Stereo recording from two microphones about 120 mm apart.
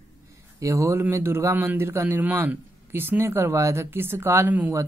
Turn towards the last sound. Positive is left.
turn(degrees=-15)  # may be behind; listen again after turning